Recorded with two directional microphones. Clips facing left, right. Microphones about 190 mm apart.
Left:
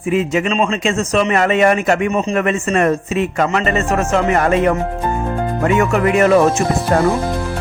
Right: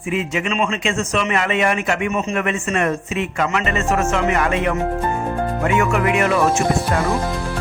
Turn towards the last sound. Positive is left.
turn(degrees=40)  # may be behind; listen again after turning